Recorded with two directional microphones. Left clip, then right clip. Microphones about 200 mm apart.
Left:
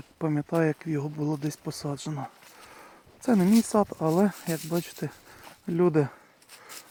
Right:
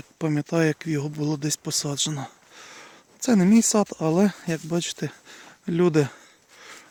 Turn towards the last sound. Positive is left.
turn(degrees=-30)  # may be behind; listen again after turning